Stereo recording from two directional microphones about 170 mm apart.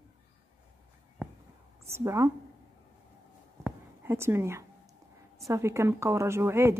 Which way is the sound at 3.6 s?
15° right (ahead or behind).